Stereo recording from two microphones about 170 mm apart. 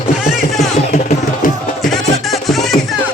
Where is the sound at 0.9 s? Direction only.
50° left (ahead or behind).